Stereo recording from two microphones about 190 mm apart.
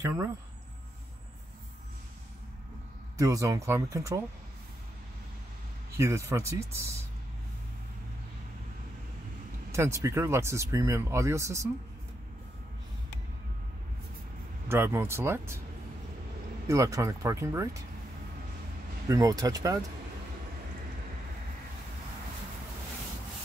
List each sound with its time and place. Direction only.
3.2 s speech: 15° right (ahead or behind)
5.9 s speech: 15° right (ahead or behind)
9.7 s speech: 15° right (ahead or behind)
14.7 s speech: 10° right (ahead or behind)
16.6 s speech: 15° right (ahead or behind)
19.0 s speech: 15° right (ahead or behind)